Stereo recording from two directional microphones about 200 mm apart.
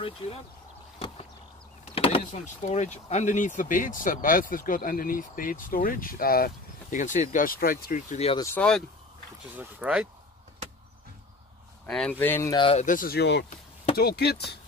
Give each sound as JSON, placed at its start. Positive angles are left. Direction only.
{"t": 0.9, "sound": "a sound", "side_deg": 30}
{"t": 2.0, "sound": "power windows", "side_deg": 25}
{"t": 2.2, "sound": "speech", "side_deg": 35}
{"t": 8.3, "sound": "speech", "side_deg": 20}
{"t": 8.5, "sound": "speech", "side_deg": 5}
{"t": 11.8, "sound": "speech", "side_deg": 5}
{"t": 12.8, "sound": "speech", "side_deg": 45}